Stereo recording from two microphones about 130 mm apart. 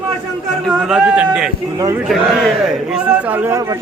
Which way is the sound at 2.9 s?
15° right (ahead or behind).